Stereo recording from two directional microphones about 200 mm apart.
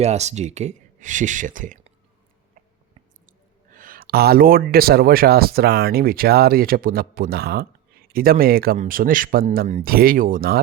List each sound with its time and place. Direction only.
0.0 s speech: 35° right (ahead or behind)
2.9 s speech: 40° right (ahead or behind)